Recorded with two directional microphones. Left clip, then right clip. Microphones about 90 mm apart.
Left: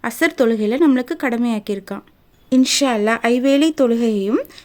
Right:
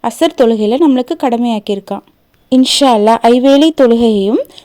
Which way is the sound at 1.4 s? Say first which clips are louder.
Right 7 dB; 40° left (ahead or behind).